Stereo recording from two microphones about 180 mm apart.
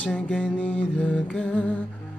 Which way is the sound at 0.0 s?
5° left (ahead or behind).